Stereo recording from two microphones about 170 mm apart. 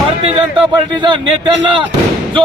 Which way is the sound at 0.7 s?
25° right (ahead or behind).